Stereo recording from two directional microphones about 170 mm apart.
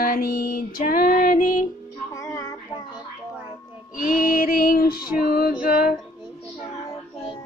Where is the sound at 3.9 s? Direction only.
55° left (ahead or behind).